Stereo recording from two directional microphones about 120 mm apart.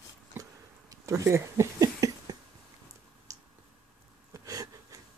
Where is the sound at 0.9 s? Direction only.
25° right (ahead or behind).